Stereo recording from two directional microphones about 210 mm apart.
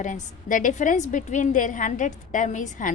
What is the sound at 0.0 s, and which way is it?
A woman's voice, 35° left (ahead or behind).